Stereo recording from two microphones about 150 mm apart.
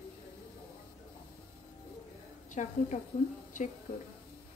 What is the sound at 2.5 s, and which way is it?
Speech, 55° left (ahead or behind).